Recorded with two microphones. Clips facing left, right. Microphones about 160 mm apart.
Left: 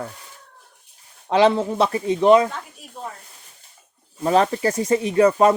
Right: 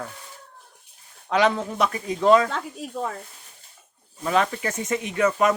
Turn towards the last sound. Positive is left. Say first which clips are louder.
# left 6 dB
turn(degrees=30)  # may be behind; listen again after turning